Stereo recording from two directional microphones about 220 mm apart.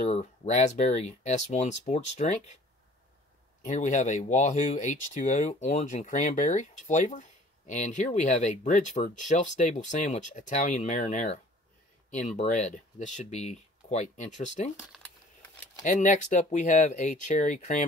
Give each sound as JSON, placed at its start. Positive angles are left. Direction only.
{"t": 0.1, "sound": "speech", "side_deg": 30}
{"t": 3.6, "sound": "speech", "side_deg": 35}
{"t": 15.8, "sound": "speech", "side_deg": 35}